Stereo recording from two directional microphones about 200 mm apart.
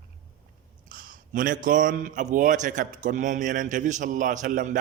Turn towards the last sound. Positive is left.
turn(degrees=-40)  # may be behind; listen again after turning